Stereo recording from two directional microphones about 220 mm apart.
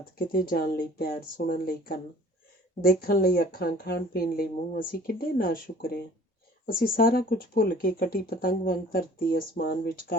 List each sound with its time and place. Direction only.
0.2 s speech: 40° left (ahead or behind)